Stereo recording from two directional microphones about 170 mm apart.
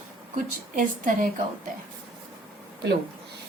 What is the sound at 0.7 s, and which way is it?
Speech, 50° right (ahead or behind).